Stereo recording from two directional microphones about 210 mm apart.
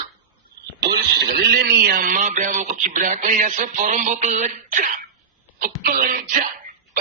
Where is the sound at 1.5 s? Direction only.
50° right (ahead or behind).